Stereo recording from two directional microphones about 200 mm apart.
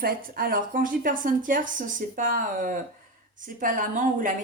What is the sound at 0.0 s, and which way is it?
A woman's voice, 45° right (ahead or behind).